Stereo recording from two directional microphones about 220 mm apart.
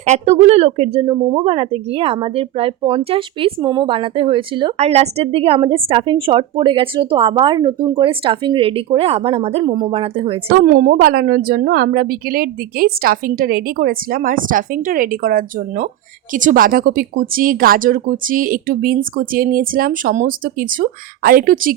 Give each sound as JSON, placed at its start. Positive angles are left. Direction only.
{"t": 0.0, "sound": "a woman's voice", "side_deg": -30}
{"t": 10.5, "sound": "speech", "side_deg": -40}